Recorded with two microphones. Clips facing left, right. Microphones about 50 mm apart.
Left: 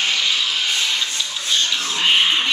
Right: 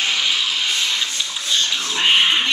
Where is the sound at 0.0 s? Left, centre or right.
Centre.